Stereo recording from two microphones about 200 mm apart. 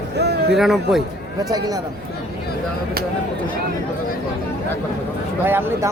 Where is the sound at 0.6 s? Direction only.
Centre (ahead or behind).